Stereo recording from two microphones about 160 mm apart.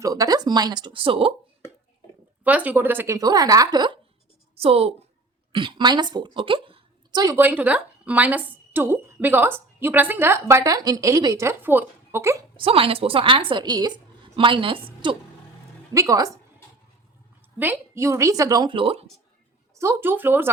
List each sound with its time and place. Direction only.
0.0 s speech: 20° right (ahead or behind)
2.4 s speech: 10° right (ahead or behind); by 3.9 s 25° right (ahead or behind)
4.5 s a woman's voice: 40° right (ahead or behind)
7.3 s speech: 10° right (ahead or behind)
12.5 s a woman's voice: 35° right (ahead or behind)
15.9 s speech: 20° right (ahead or behind)
17.6 s speech: 15° right (ahead or behind); by 19.0 s 35° right (ahead or behind)
19.7 s speech: 15° right (ahead or behind)